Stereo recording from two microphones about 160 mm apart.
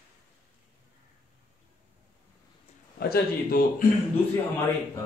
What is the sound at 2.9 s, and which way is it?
Speech, 70° left (ahead or behind).